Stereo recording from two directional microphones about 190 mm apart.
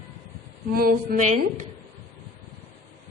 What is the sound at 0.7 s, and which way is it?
Speech, 50° right (ahead or behind).